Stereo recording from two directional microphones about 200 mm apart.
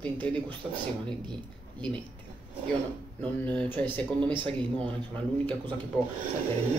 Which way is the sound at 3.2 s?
10° left (ahead or behind).